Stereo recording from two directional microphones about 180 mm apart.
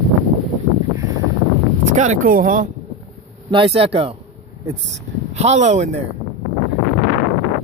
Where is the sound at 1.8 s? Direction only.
45° right (ahead or behind).